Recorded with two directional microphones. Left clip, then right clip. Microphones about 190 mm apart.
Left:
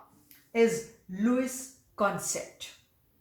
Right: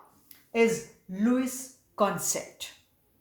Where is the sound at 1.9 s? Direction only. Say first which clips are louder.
Right 2 dB; 40° right (ahead or behind).